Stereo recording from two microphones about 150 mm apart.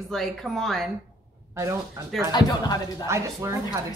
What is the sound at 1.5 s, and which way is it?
Speech, 20° right (ahead or behind).